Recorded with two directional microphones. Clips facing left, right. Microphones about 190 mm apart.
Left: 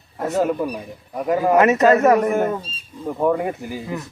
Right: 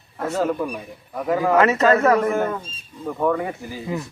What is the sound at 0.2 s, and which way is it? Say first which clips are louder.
Speech: left 2 dB; 20° left (ahead or behind).